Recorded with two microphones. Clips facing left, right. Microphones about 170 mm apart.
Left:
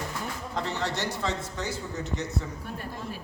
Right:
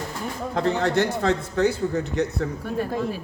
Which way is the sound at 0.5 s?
55° right (ahead or behind).